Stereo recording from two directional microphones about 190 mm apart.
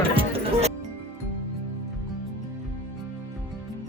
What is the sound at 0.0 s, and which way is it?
Music, 30° right (ahead or behind).